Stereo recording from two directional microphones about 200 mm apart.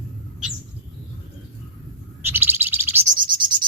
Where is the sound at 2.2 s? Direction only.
10° right (ahead or behind).